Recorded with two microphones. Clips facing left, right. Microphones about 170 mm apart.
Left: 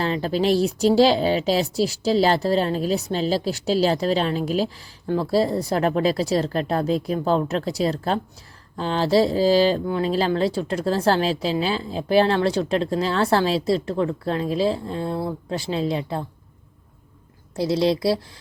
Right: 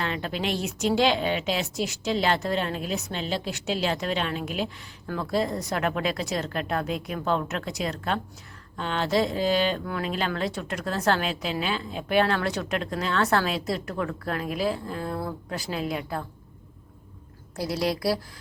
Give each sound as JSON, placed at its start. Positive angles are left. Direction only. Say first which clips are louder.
{"t": 0.0, "sound": "a woman's voice", "louder": "left 7 dB", "side_deg": 35}
{"t": 17.6, "sound": "speech", "louder": "left 7 dB", "side_deg": 25}